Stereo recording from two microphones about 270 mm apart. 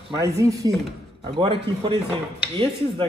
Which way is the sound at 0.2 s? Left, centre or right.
Centre.